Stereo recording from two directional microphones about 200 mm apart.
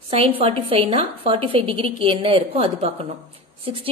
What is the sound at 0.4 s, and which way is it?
A woman's voice, 30° right (ahead or behind).